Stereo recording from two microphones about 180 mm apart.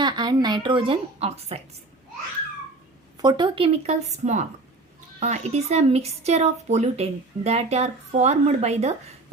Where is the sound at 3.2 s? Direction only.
25° right (ahead or behind).